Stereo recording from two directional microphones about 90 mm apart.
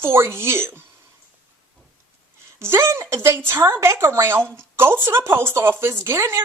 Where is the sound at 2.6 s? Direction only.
30° right (ahead or behind).